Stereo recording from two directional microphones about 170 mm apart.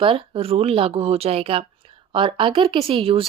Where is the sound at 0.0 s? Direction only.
35° right (ahead or behind).